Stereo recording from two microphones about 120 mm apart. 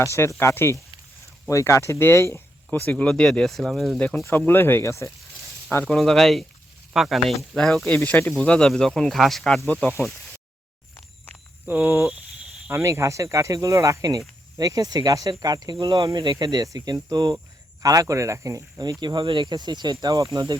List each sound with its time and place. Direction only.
0.0 s speech: 25° left (ahead or behind)
2.8 s speech: 10° left (ahead or behind)
4.2 s speech: 15° left (ahead or behind)
5.8 s speech: 5° left (ahead or behind)
7.9 s speech: 15° left (ahead or behind)
11.6 s speech: 20° right (ahead or behind)